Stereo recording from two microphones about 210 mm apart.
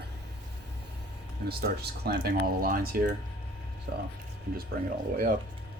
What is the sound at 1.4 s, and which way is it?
Speech, 45° right (ahead or behind).